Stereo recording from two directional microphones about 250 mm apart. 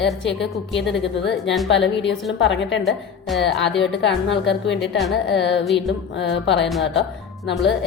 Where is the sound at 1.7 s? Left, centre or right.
Left.